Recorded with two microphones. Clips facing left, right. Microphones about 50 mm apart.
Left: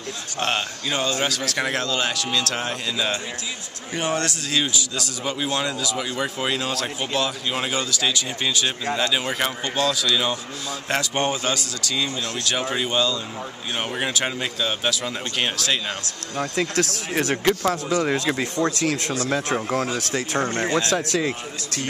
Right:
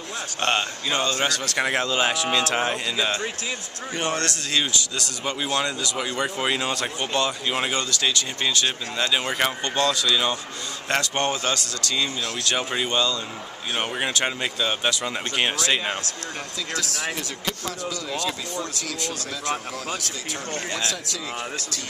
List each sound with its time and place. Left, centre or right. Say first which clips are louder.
0.4 s speech: right 1 dB; centre
0.9 s a man's voice: even; centre
1.2 s speech: even; centre
3.9 s speech: left 2 dB; centre
16.3 s speech: left 9 dB; left
17.6 s speech: left 9 dB; left
20.0 s speech: left 8 dB; left
20.4 s speech: left 6 dB; left
20.9 s speech: left 10 dB; left